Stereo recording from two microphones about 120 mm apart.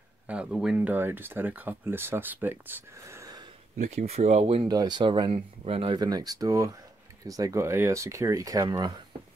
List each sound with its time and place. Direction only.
0.3 s speech: 5° right (ahead or behind)
0.7 s speech: 15° right (ahead or behind)
3.7 s speech: 75° right (ahead or behind); by 4.6 s 60° right (ahead or behind)
4.6 s speech: 35° right (ahead or behind)